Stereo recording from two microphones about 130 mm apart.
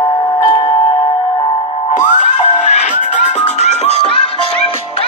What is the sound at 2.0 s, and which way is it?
Music, 70° left (ahead or behind).